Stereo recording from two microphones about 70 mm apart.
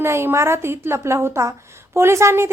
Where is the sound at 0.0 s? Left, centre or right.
Right.